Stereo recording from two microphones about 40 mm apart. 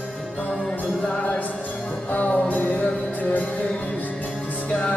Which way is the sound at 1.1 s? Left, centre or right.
Left.